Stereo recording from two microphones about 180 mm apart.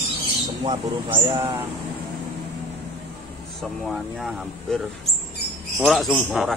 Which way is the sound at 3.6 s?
Centre (ahead or behind).